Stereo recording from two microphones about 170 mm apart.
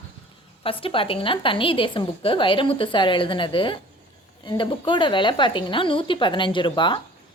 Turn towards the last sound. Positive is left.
turn(degrees=30)  # may be behind; listen again after turning